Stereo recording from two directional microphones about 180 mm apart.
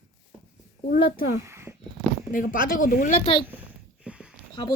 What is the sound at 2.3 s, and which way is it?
Speech, 50° left (ahead or behind).